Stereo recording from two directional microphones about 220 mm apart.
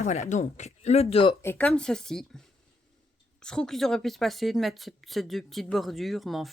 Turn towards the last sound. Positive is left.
turn(degrees=0)  # may be behind; listen again after turning